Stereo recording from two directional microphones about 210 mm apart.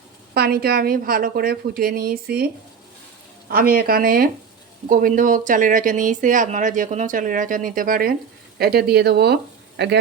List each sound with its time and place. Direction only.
0.3 s a woman's voice: 50° right (ahead or behind)
3.5 s a woman's voice: 45° right (ahead or behind)